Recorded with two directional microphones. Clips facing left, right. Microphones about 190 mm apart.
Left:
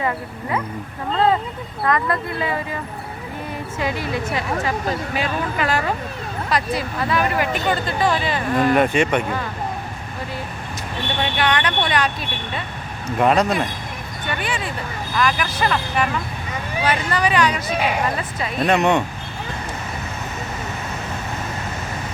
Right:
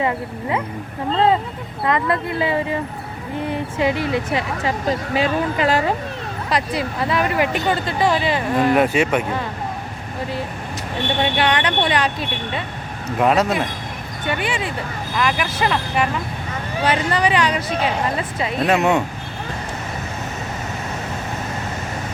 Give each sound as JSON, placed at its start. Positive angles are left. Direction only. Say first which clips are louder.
{"t": 0.0, "sound": "speech", "louder": "right 3 dB", "side_deg": -20}
{"t": 1.8, "sound": "speech", "louder": "right 1 dB", "side_deg": -25}
{"t": 8.5, "sound": "speech", "louder": "even", "side_deg": -5}
{"t": 11.2, "sound": "speech", "louder": "right 1 dB", "side_deg": -25}
{"t": 13.1, "sound": "speech", "louder": "even", "side_deg": -5}
{"t": 14.4, "sound": "speech", "louder": "right 2 dB", "side_deg": -25}
{"t": 17.7, "sound": "speech", "louder": "even", "side_deg": 10}
{"t": 18.2, "sound": "speech", "louder": "right 3 dB", "side_deg": -25}
{"t": 18.6, "sound": "speech", "louder": "even", "side_deg": -5}